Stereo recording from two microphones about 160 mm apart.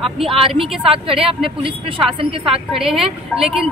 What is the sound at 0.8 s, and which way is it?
Speech, 35° right (ahead or behind).